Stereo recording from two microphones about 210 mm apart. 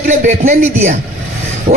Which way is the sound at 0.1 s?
35° right (ahead or behind).